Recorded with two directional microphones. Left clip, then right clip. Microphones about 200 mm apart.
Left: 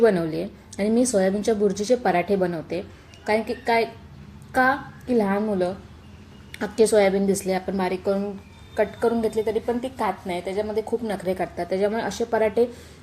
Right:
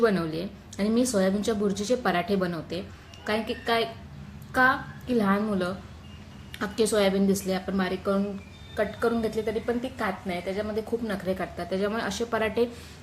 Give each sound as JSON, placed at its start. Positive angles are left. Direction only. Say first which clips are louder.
{"t": 0.0, "sound": "a woman's voice", "louder": "left 5 dB", "side_deg": 20}